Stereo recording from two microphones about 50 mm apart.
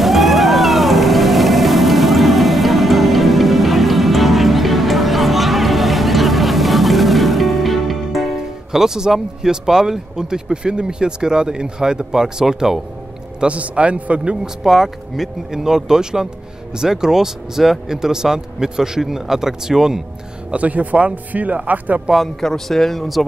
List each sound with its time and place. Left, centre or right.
0.0 s vehicle: centre
8.4 s speech: centre
13.4 s speech: right
14.6 s speech: centre
20.5 s speech: right
22.1 s speech: centre